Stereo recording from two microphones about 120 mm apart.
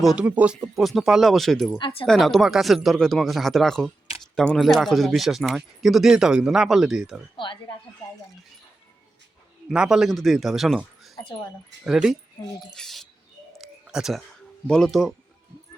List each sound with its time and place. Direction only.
0.0 s speech: 5° right (ahead or behind)
1.8 s speech: 50° left (ahead or behind)
2.0 s speech: centre (ahead or behind)
7.3 s speech: 45° left (ahead or behind)
9.6 s speech: 5° right (ahead or behind)
11.8 s speech: 5° right (ahead or behind)
12.7 s a sound: 5° left (ahead or behind)
14.7 s speech: 5° left (ahead or behind)